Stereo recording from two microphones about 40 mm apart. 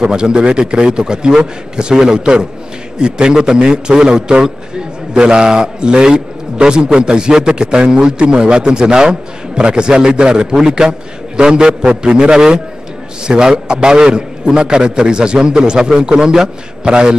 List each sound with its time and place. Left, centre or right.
0.0 s a man's voice: right